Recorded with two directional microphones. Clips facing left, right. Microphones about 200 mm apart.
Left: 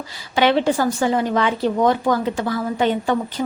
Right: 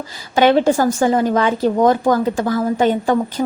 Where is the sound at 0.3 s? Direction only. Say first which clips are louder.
Right 4 dB; 45° right (ahead or behind).